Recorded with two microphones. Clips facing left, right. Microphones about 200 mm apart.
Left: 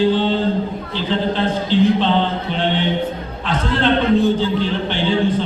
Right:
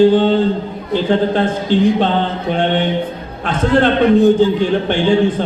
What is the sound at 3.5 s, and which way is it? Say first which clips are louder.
Speech: right 5 dB; 50° right (ahead or behind).